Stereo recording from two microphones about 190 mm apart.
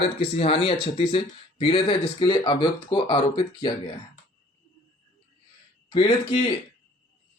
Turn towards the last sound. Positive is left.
turn(degrees=25)  # may be behind; listen again after turning